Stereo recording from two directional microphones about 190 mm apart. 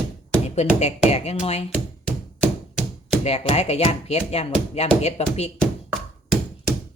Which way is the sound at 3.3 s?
35° left (ahead or behind).